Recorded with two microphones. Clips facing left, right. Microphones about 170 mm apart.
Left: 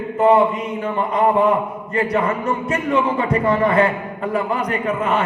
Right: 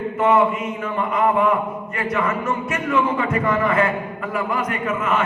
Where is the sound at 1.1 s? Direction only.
35° left (ahead or behind).